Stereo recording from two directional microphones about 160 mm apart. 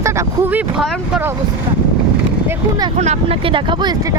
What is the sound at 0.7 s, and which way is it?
Speech, 5° right (ahead or behind).